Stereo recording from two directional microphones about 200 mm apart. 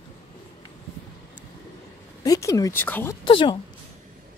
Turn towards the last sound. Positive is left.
turn(degrees=25)  # may be behind; listen again after turning